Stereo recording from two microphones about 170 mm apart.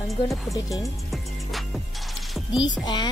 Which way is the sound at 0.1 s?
Centre (ahead or behind).